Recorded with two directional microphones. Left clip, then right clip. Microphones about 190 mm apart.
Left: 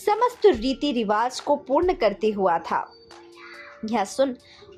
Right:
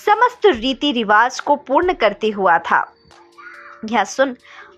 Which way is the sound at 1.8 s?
10° right (ahead or behind).